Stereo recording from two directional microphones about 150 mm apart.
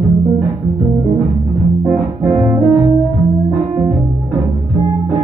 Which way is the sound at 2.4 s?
20° right (ahead or behind).